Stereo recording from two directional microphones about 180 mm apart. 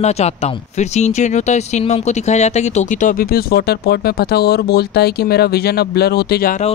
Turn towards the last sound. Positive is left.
turn(degrees=60)  # may be behind; listen again after turning